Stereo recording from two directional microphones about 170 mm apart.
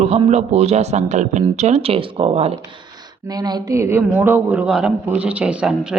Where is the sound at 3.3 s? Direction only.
20° right (ahead or behind); by 6.0 s 5° right (ahead or behind).